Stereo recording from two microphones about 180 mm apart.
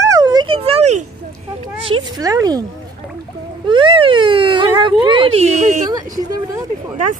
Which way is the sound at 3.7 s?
30° right (ahead or behind).